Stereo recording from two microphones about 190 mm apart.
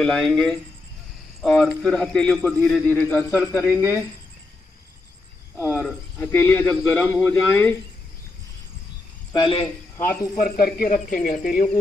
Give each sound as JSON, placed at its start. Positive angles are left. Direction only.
{"t": 0.0, "sound": "a man's voice", "side_deg": 5}
{"t": 5.7, "sound": "speech", "side_deg": 5}
{"t": 9.3, "sound": "speech", "side_deg": 25}
{"t": 10.3, "sound": "speech", "side_deg": 50}